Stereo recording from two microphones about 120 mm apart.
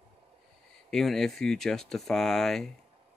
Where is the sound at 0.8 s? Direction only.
5° left (ahead or behind).